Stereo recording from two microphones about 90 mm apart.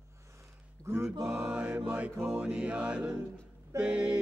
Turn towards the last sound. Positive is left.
turn(degrees=-10)  # may be behind; listen again after turning